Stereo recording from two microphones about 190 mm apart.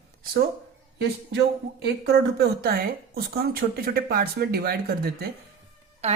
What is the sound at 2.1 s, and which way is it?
A woman's voice, 60° right (ahead or behind).